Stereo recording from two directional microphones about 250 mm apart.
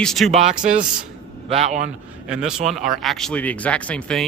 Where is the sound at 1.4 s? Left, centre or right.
Right.